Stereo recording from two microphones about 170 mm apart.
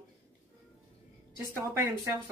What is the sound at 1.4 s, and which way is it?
Speech, 15° right (ahead or behind).